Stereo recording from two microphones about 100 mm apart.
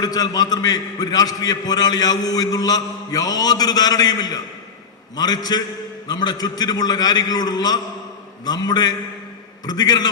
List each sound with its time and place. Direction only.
0.0 s a man's voice: 40° left (ahead or behind)